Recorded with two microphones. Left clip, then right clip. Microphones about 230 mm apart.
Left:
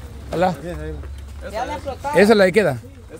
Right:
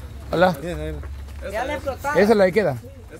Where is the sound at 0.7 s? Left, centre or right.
Right.